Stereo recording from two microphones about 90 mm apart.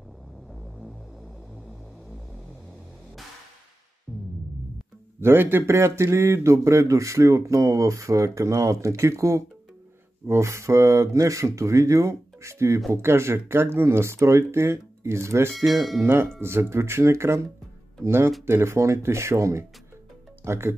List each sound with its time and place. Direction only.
4.1 s music: 5° right (ahead or behind)
5.2 s speech: 25° right (ahead or behind)
15.6 s speech: centre (ahead or behind)
16.0 s speech: 25° right (ahead or behind)